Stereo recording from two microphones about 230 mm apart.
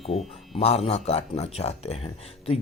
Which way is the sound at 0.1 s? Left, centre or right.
Left.